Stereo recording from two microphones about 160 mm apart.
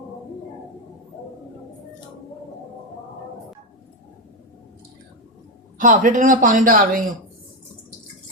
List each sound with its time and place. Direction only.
5.7 s a man's voice: 55° right (ahead or behind)